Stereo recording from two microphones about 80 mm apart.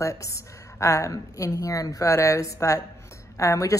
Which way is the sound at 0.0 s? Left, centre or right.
Left.